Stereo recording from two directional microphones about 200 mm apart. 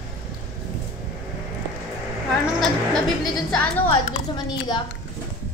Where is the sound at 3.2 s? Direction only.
Centre (ahead or behind).